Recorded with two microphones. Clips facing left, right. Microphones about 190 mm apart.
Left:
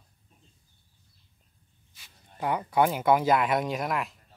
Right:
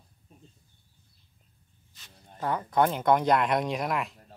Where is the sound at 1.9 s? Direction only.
10° left (ahead or behind).